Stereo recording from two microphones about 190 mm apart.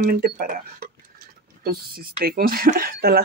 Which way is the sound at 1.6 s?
50° right (ahead or behind).